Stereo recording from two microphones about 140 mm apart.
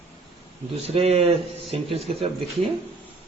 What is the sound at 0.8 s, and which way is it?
A man's voice, 50° right (ahead or behind).